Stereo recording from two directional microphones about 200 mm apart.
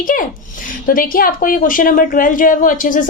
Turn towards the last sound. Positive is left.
turn(degrees=40)  # may be behind; listen again after turning